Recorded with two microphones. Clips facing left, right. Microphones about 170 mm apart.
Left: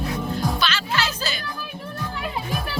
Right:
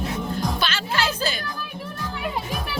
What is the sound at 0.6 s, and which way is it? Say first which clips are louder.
Music: even; 50° right (ahead or behind).